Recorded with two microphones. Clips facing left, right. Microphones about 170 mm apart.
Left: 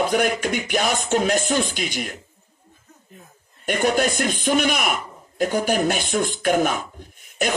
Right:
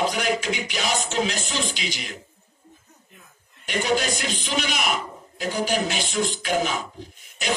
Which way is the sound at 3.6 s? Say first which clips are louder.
Left 4 dB; 55° left (ahead or behind).